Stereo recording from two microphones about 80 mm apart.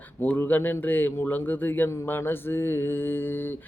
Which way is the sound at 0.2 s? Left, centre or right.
Left.